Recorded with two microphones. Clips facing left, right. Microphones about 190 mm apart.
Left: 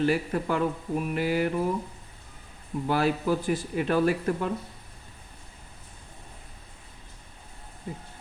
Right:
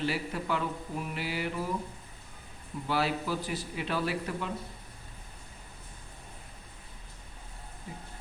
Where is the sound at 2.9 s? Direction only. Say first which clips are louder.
Left 5 dB; 50° left (ahead or behind).